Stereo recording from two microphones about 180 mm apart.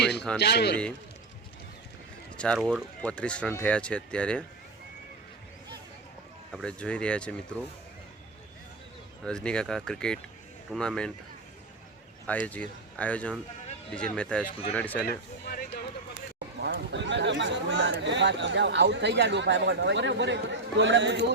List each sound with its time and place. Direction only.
0.0 s a sound: 70° left (ahead or behind)
0.3 s speech: 70° left (ahead or behind)
2.4 s speech: 5° left (ahead or behind)
6.5 s speech: centre (ahead or behind)
9.2 s speech: 5° left (ahead or behind)
12.3 s speech: 10° left (ahead or behind)
15.0 s speech: 60° left (ahead or behind)
16.6 s speech: 65° right (ahead or behind)